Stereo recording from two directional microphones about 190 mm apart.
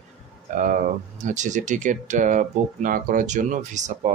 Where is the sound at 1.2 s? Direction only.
40° right (ahead or behind).